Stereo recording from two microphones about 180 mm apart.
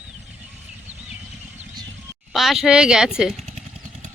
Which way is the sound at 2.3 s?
Centre (ahead or behind).